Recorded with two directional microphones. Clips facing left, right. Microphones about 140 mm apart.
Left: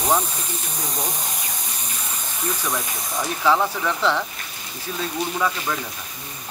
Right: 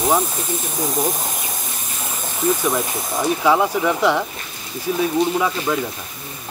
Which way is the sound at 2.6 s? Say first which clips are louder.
Right 6 dB; 25° right (ahead or behind).